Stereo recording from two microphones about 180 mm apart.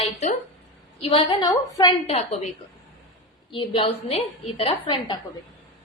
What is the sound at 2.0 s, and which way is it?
Speech, 40° left (ahead or behind).